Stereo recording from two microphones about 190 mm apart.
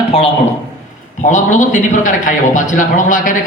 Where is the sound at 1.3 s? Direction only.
40° left (ahead or behind).